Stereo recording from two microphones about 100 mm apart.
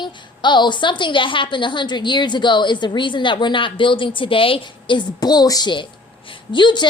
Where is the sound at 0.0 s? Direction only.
50° left (ahead or behind).